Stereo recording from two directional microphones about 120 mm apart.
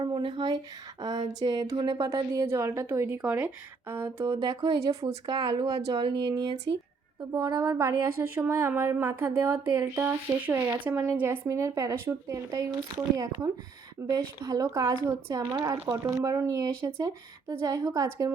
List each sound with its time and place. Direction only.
0.0 s speech: 40° right (ahead or behind); by 3.2 s 20° right (ahead or behind)
3.2 s speech: 10° right (ahead or behind)
4.4 s speech: 40° right (ahead or behind)
5.2 s speech: 40° right (ahead or behind)